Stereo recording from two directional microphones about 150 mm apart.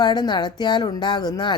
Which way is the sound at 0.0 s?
30° left (ahead or behind).